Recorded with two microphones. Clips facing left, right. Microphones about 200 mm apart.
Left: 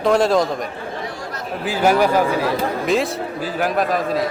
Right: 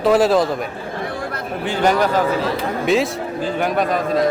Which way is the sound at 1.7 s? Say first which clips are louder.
Left 1 dB; 5° left (ahead or behind).